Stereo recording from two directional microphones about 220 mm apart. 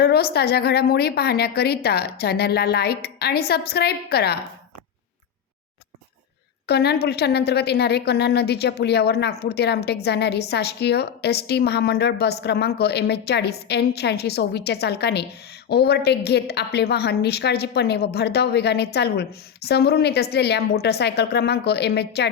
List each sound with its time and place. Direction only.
0.0 s a woman's voice: 45° left (ahead or behind)
6.7 s a woman's voice: 45° left (ahead or behind)